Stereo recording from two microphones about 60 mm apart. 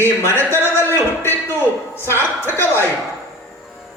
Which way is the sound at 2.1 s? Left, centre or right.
Left.